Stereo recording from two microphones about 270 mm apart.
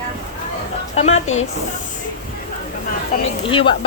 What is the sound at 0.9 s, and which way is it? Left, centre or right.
Speech, left.